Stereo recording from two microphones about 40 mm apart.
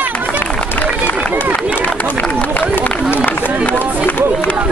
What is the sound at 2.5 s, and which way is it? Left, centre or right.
Run, left.